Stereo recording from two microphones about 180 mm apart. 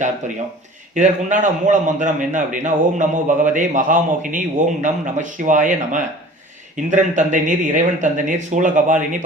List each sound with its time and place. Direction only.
0.2 s a man's voice: 40° right (ahead or behind)